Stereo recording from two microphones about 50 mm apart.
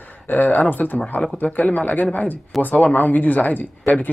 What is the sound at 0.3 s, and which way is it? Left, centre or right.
Speech, left.